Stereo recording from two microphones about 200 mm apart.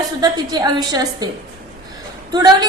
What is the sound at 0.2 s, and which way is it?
Speech, 20° right (ahead or behind).